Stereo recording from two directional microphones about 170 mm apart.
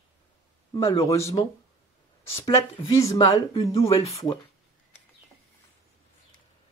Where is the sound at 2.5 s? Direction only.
20° left (ahead or behind).